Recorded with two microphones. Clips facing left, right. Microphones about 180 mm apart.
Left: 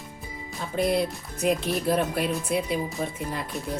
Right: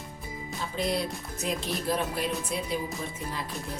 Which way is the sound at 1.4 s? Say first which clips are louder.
Left 7 dB; 60° left (ahead or behind).